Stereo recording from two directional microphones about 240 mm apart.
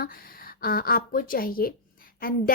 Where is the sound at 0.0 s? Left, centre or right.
Left.